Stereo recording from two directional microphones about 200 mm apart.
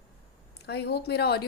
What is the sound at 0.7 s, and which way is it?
Speech, 55° left (ahead or behind).